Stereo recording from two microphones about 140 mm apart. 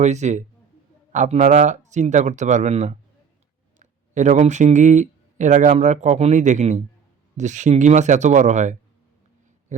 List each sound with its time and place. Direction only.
0.0 s speech: 55° right (ahead or behind)